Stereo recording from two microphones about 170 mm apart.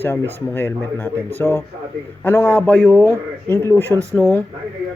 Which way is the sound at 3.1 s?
20° right (ahead or behind).